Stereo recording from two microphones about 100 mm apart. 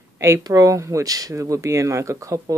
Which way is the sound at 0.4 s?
35° right (ahead or behind).